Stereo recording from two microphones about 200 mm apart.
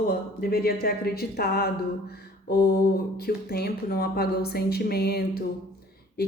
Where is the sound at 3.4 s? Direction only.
50° left (ahead or behind).